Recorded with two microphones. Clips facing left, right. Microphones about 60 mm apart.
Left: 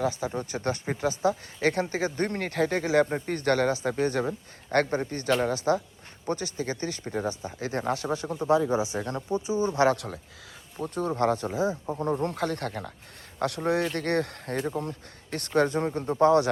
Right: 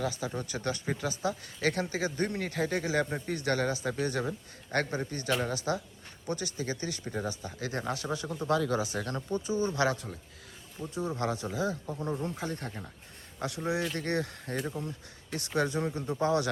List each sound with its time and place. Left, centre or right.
0.0 s a man's voice: left
10.8 s speech: left
11.1 s a man's voice: left
11.5 s speech: left
12.2 s speech: left
13.4 s speech: left